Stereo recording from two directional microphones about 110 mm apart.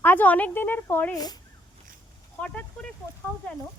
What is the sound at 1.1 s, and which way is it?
Speech, 35° left (ahead or behind).